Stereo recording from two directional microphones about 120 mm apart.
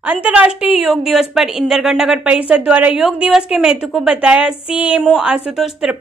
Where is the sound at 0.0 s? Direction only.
10° right (ahead or behind).